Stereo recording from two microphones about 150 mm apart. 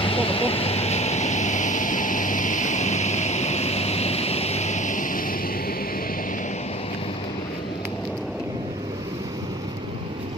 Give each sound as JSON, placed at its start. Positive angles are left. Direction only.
{"t": 0.0, "sound": "vehicle", "side_deg": 40}